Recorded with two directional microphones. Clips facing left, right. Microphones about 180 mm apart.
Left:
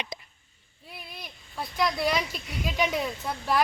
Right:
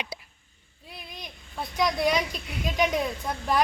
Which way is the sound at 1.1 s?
5° left (ahead or behind).